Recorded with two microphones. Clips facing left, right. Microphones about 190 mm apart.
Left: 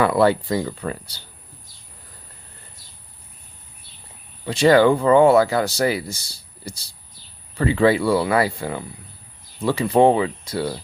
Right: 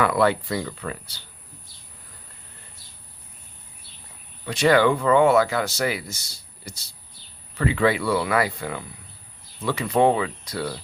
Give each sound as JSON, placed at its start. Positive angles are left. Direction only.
{"t": 0.0, "sound": "speech", "side_deg": 30}
{"t": 4.4, "sound": "speech", "side_deg": 30}